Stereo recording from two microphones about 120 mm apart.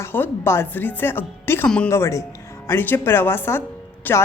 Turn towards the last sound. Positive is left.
turn(degrees=15)  # may be behind; listen again after turning